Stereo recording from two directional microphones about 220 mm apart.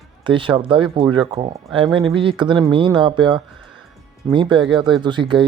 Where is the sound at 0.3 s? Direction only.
25° right (ahead or behind).